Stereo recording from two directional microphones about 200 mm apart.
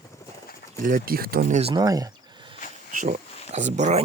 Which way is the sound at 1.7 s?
20° right (ahead or behind).